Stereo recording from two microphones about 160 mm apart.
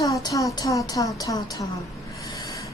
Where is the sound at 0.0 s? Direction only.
25° left (ahead or behind).